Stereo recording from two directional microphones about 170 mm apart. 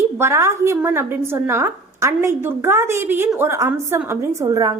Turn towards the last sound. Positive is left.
turn(degrees=-20)  # may be behind; listen again after turning